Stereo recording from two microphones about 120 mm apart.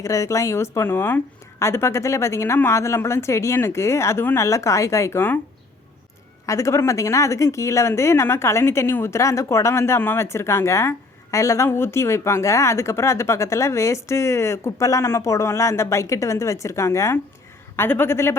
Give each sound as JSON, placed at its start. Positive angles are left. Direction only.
{"t": 0.0, "sound": "speech", "side_deg": 25}
{"t": 6.4, "sound": "speech", "side_deg": 25}